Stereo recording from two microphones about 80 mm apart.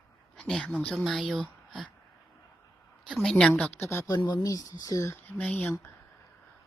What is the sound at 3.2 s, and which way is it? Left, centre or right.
Speech, centre.